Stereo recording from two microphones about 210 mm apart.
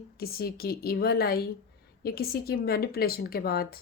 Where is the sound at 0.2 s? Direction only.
45° left (ahead or behind).